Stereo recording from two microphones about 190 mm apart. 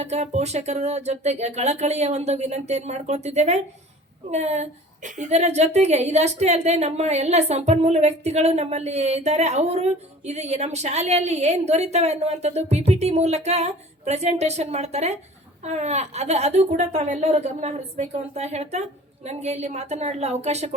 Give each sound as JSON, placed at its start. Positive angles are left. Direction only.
{"t": 0.0, "sound": "a woman's voice", "side_deg": -35}